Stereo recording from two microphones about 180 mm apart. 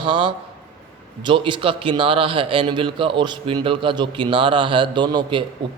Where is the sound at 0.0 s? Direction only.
25° right (ahead or behind).